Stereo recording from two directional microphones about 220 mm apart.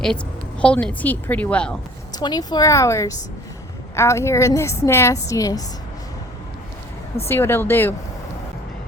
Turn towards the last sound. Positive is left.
turn(degrees=10)  # may be behind; listen again after turning